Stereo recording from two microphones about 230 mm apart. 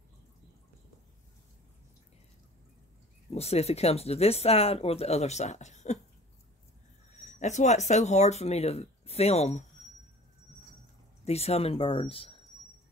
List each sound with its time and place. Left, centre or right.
3.3 s speech: left
7.2 s speech: left
11.2 s speech: left